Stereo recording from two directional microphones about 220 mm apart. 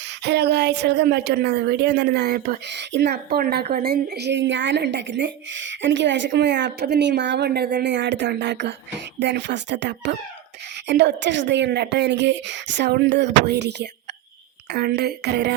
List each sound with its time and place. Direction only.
0.3 s a woman's voice: 50° right (ahead or behind)